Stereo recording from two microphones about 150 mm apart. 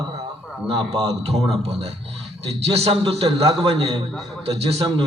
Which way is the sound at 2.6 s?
40° right (ahead or behind).